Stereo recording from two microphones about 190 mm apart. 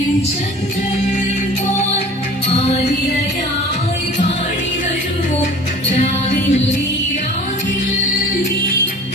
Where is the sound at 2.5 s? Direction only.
35° left (ahead or behind).